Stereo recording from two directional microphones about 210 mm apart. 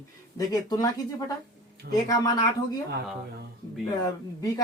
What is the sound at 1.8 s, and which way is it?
Speech, 50° right (ahead or behind).